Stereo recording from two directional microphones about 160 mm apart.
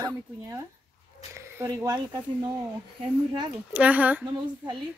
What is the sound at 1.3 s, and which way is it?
Speech, 20° right (ahead or behind).